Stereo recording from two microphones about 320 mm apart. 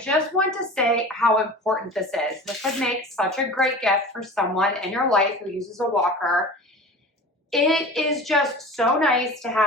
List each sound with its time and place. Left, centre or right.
0.0 s a woman's voice: centre
7.5 s a woman's voice: centre